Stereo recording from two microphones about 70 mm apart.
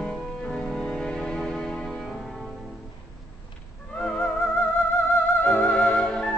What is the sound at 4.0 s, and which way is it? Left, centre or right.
Music, centre.